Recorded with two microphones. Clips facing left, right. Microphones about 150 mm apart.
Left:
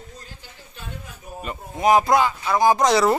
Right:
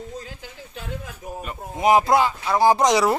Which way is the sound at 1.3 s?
90° right.